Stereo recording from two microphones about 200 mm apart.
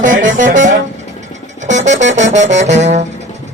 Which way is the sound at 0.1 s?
75° right (ahead or behind).